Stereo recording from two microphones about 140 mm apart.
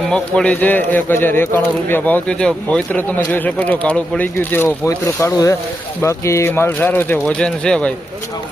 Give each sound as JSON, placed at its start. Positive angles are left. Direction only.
{"t": 0.1, "sound": "speech", "side_deg": 5}